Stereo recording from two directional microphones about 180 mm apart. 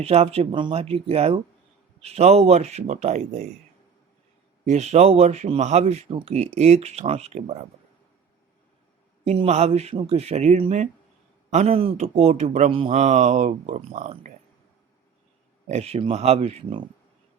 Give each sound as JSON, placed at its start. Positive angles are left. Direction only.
{"t": 0.0, "sound": "a man's voice", "side_deg": -35}
{"t": 4.6, "sound": "a man's voice", "side_deg": -40}
{"t": 9.2, "sound": "a man's voice", "side_deg": -35}
{"t": 15.7, "sound": "a man's voice", "side_deg": -35}